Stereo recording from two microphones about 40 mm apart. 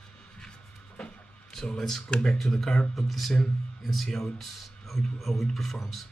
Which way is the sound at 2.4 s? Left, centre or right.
Centre.